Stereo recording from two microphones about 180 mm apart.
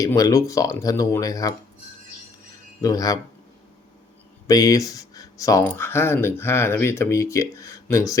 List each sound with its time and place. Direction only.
0.0 s speech: 20° left (ahead or behind)
2.8 s speech: 20° left (ahead or behind)
4.4 s speech: 20° left (ahead or behind)